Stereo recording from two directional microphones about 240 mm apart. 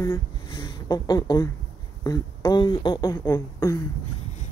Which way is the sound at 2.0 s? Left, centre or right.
Centre.